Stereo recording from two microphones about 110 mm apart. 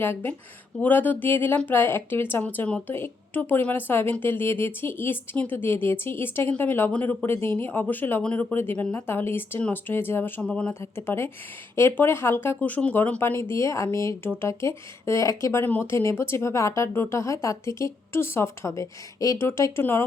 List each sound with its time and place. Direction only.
0.0 s speech: 20° left (ahead or behind)
10.4 s speech: 10° left (ahead or behind)
10.8 s speech: 20° left (ahead or behind)